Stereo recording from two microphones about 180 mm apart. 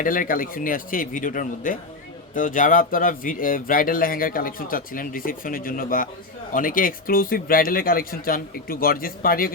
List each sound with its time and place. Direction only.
0.0 s speech: 50° left (ahead or behind)